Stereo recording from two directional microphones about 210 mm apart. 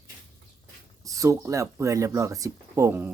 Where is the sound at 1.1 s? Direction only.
15° right (ahead or behind).